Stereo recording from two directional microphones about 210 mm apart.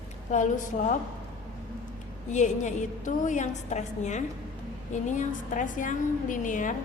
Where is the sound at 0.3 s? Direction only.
35° left (ahead or behind).